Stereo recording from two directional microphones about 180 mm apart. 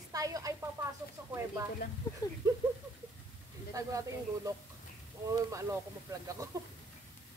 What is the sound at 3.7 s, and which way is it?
Speech, 20° right (ahead or behind).